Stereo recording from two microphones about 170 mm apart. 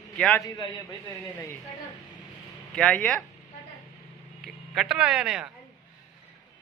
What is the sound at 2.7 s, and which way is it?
Speech, 5° left (ahead or behind).